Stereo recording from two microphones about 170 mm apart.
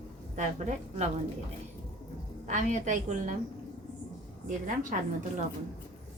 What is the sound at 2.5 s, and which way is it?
Speech, 45° right (ahead or behind).